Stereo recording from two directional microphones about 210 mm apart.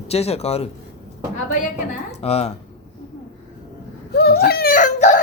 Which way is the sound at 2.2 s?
30° left (ahead or behind).